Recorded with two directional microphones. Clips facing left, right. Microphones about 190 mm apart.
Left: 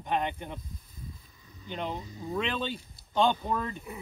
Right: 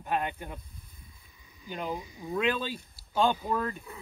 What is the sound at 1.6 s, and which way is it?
Speech, 5° right (ahead or behind).